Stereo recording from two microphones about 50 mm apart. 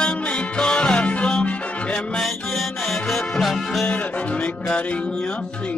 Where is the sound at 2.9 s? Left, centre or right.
Centre.